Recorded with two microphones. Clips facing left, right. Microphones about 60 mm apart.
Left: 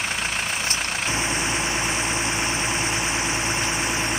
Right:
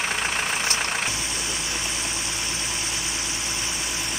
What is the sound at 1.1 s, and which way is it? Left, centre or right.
Vehicle, left.